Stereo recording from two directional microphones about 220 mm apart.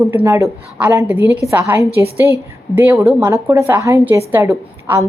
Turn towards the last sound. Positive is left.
turn(degrees=-10)  # may be behind; listen again after turning